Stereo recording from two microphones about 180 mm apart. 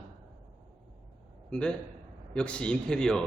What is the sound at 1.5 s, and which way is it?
Speech, 5° left (ahead or behind).